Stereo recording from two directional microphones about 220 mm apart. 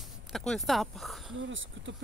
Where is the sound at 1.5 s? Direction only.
60° right (ahead or behind).